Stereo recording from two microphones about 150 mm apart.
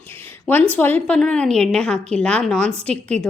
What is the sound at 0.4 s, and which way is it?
A woman's voice, 10° left (ahead or behind).